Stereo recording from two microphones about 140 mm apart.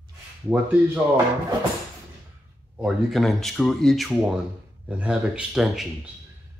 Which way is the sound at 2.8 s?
Centre (ahead or behind).